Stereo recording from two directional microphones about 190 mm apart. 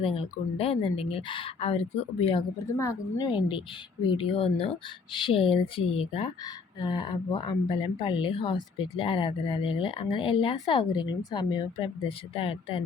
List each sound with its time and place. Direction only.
0.0 s speech: 30° left (ahead or behind)
2.7 s a woman's voice: 20° left (ahead or behind)
4.1 s speech: 30° left (ahead or behind)